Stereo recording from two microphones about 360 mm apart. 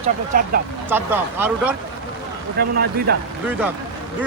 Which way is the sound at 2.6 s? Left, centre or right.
Right.